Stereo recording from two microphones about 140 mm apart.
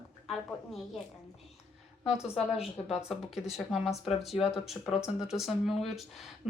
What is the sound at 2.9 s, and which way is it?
Speech, centre (ahead or behind).